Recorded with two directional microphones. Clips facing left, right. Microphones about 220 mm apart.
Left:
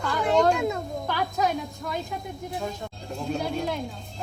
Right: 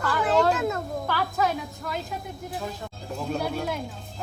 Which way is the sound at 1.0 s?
15° left (ahead or behind).